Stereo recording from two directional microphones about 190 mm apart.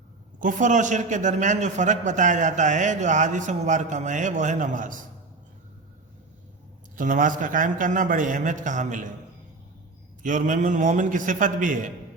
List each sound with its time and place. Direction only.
0.3 s a man's voice: 45° right (ahead or behind)
6.9 s a man's voice: 45° right (ahead or behind)
10.2 s a man's voice: 40° right (ahead or behind)